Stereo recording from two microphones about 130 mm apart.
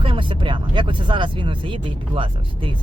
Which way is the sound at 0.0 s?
40° right (ahead or behind).